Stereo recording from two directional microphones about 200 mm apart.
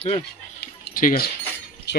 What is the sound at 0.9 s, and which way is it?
Speech, 45° left (ahead or behind).